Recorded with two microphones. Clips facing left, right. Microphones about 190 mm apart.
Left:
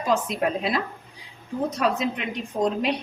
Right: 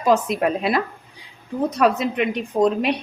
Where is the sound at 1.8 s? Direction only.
60° right (ahead or behind).